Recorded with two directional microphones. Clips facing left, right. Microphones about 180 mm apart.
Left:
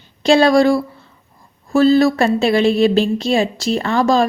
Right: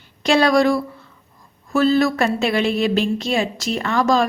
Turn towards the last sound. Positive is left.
turn(degrees=30)  # may be behind; listen again after turning